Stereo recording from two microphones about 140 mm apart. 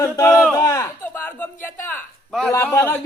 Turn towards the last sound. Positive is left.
turn(degrees=20)  # may be behind; listen again after turning